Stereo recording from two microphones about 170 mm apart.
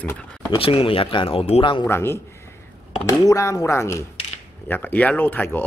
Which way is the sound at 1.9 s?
15° left (ahead or behind).